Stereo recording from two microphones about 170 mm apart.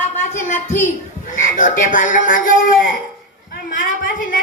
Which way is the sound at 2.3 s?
55° left (ahead or behind).